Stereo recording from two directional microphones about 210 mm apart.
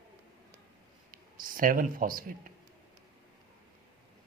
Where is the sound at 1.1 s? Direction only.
40° right (ahead or behind).